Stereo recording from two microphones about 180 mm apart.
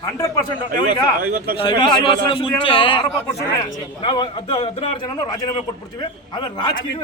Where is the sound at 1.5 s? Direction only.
25° left (ahead or behind).